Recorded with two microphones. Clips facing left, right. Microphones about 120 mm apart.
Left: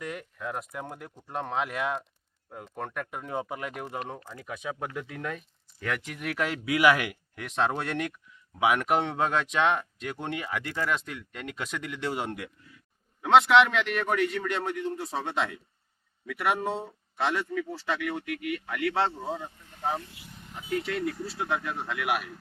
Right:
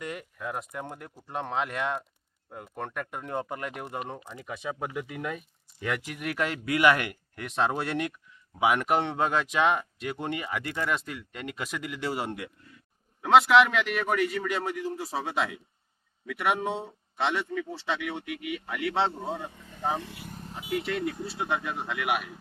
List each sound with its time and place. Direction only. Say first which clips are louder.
0.0 s speech: even; centre (ahead or behind)
20.0 s speech: right 6 dB; 85° right
20.2 s vehicle: right 6 dB; 40° right (ahead or behind)
20.6 s speech: even; 5° right (ahead or behind)